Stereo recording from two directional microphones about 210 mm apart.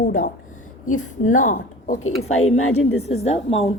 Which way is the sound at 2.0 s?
85° left.